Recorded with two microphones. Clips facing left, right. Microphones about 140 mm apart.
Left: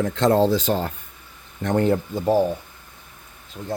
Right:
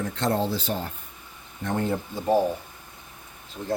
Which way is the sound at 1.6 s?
75° left (ahead or behind).